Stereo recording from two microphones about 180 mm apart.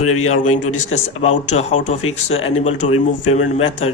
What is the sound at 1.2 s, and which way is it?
Speech, 40° left (ahead or behind).